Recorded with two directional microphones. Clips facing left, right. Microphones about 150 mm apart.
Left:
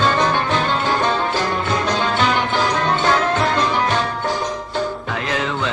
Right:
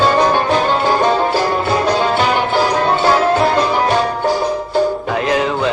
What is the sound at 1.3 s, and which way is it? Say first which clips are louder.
Music: right 5 dB; 10° right (ahead or behind).